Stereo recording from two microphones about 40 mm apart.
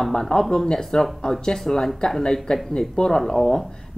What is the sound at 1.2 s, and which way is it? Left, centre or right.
Speech, centre.